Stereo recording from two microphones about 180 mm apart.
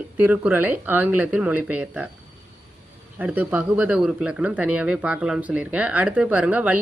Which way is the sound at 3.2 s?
10° right (ahead or behind).